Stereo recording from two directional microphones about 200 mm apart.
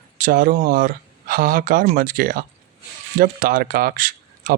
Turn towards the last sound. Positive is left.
turn(degrees=-45)  # may be behind; listen again after turning